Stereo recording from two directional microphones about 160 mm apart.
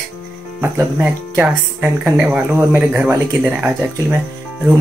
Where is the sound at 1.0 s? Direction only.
10° right (ahead or behind).